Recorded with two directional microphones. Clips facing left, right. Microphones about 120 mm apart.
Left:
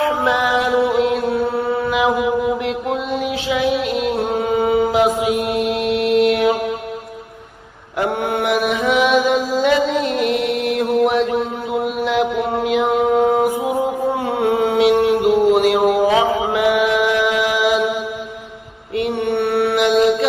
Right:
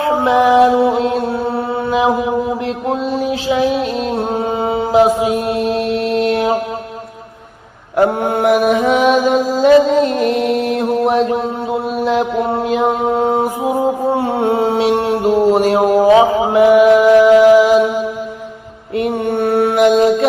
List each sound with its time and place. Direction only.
0.0 s mantra: 35° right (ahead or behind)
7.9 s mantra: 35° right (ahead or behind)